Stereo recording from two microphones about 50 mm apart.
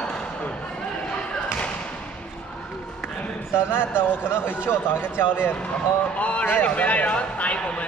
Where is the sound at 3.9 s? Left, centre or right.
Right.